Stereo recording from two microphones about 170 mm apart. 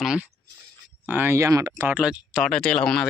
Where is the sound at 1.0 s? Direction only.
10° right (ahead or behind).